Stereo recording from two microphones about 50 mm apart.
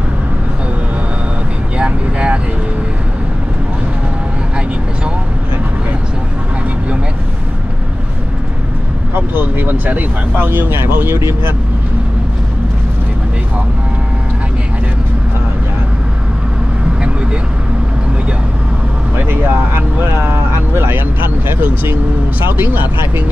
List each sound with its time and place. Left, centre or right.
1.8 s vehicle: right
9.1 s speech: right
19.2 s vehicle: right
22.5 s speech: right